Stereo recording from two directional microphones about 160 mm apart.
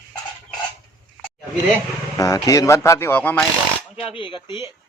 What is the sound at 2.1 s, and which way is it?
A man's voice, 20° left (ahead or behind).